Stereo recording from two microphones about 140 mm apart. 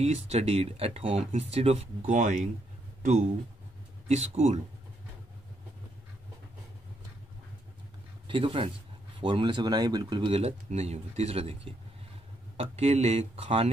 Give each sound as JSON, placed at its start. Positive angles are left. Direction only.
{"t": 0.0, "sound": "speech", "side_deg": -50}
{"t": 8.3, "sound": "speech", "side_deg": -40}